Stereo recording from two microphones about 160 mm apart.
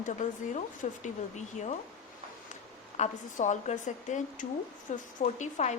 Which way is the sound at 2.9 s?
45° left (ahead or behind).